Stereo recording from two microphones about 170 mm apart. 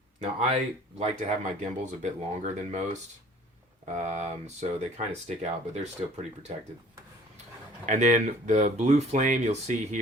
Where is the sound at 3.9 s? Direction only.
45° right (ahead or behind).